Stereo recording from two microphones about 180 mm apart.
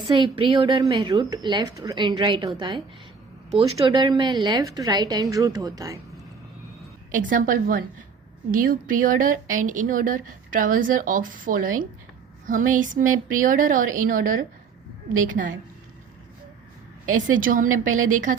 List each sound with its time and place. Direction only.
0.2 s a woman's voice: 30° right (ahead or behind)
3.8 s a woman's voice: 25° right (ahead or behind)
7.1 s a woman's voice: 45° right (ahead or behind)
17.2 s a woman's voice: 50° right (ahead or behind)